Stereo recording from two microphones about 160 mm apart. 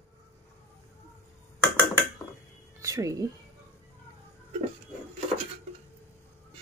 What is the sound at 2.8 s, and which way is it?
Speech, 20° right (ahead or behind).